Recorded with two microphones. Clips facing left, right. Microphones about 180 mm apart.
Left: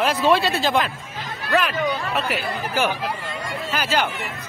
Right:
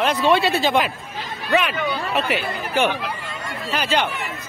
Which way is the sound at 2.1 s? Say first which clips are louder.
Right 2 dB; centre (ahead or behind).